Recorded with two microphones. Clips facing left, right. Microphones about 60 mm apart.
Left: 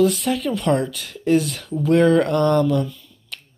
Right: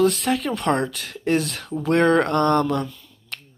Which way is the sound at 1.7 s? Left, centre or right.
Right.